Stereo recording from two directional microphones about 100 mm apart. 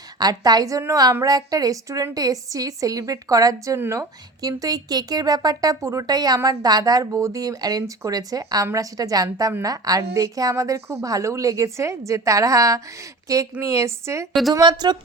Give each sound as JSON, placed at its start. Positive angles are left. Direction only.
{"t": 0.2, "sound": "a woman's voice", "side_deg": -40}
{"t": 4.4, "sound": "speech", "side_deg": -40}
{"t": 14.5, "sound": "speech", "side_deg": -45}